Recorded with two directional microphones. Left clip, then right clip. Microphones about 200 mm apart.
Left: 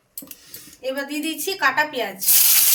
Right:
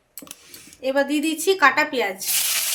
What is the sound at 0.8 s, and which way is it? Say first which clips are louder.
A woman's voice: right 5 dB; 55° right (ahead or behind).